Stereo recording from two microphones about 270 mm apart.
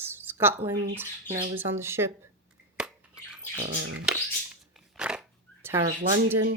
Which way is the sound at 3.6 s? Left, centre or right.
Right.